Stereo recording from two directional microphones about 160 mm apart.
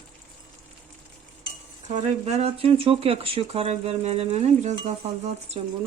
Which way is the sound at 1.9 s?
40° right (ahead or behind).